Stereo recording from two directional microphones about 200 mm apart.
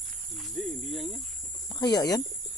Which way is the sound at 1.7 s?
20° left (ahead or behind).